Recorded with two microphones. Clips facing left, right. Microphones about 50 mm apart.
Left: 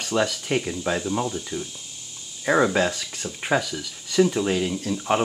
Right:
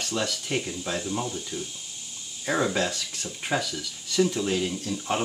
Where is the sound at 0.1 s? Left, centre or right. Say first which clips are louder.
Left 7 dB; centre.